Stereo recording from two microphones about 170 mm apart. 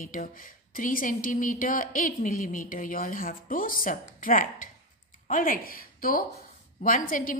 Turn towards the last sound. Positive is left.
turn(degrees=50)  # may be behind; listen again after turning